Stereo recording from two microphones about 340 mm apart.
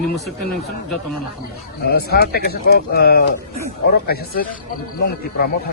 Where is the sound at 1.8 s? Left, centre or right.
Left.